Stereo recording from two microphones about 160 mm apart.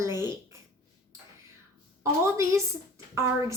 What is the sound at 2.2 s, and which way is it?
Speech, 20° right (ahead or behind).